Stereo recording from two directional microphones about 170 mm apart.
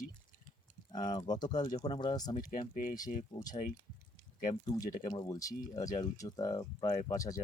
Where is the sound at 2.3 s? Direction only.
50° left (ahead or behind).